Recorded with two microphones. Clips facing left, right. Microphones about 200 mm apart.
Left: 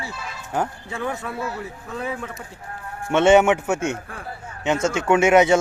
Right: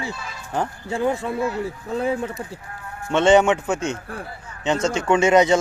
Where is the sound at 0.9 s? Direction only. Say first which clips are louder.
Right 6 dB; 30° right (ahead or behind).